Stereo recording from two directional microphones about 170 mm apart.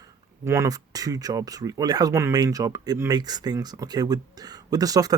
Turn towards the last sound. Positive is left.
turn(degrees=-20)  # may be behind; listen again after turning